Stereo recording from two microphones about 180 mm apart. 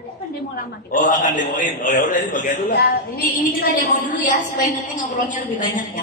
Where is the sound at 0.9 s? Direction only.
45° left (ahead or behind).